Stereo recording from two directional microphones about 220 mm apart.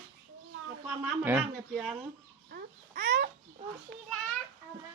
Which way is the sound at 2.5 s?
45° right (ahead or behind).